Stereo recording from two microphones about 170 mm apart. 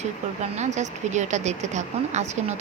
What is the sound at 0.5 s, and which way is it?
Speech, 45° right (ahead or behind).